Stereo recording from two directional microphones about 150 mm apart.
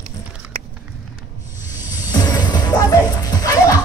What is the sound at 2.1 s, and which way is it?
Music, 30° left (ahead or behind).